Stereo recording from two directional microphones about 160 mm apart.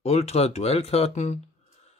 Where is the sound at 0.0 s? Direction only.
40° left (ahead or behind).